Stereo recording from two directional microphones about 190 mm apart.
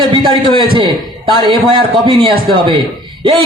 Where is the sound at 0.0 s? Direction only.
25° right (ahead or behind).